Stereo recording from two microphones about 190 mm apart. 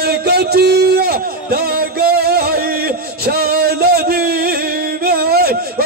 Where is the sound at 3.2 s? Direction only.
55° right (ahead or behind).